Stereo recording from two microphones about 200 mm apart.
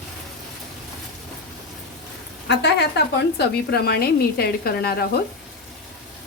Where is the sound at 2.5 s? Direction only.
60° left (ahead or behind).